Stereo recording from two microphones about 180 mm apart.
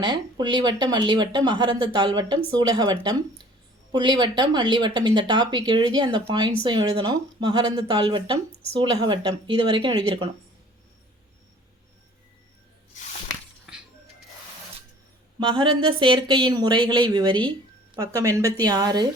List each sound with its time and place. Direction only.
0.0 s speech: 25° right (ahead or behind)
15.4 s a woman's voice: 25° right (ahead or behind)